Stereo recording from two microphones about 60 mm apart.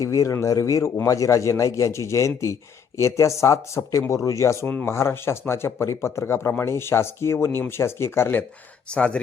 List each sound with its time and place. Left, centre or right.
0.0 s a man's voice: left
4.9 s speech: left
8.9 s speech: centre